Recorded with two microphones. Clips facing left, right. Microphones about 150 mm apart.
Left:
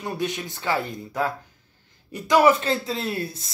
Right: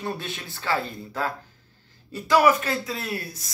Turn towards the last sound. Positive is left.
turn(degrees=25)  # may be behind; listen again after turning